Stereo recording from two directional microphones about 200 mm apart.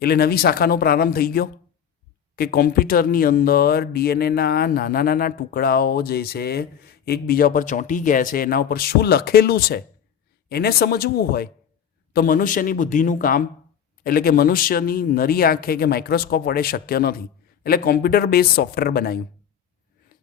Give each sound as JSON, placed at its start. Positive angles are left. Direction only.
{"t": 0.0, "sound": "speech", "side_deg": 50}